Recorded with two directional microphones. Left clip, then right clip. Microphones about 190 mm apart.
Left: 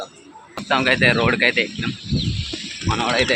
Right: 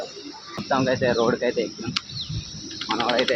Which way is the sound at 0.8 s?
30° left (ahead or behind).